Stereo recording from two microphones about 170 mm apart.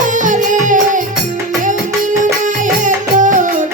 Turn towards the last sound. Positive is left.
turn(degrees=-50)  # may be behind; listen again after turning